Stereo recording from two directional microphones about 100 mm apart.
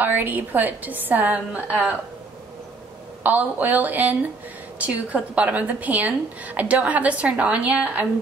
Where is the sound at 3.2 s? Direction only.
20° right (ahead or behind).